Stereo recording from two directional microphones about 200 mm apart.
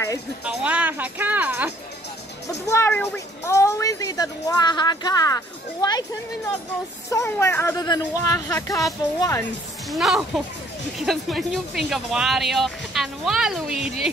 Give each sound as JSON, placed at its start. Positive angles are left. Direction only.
{"t": 0.5, "sound": "speech", "side_deg": -5}
{"t": 2.4, "sound": "speech", "side_deg": 15}
{"t": 9.8, "sound": "speech", "side_deg": 0}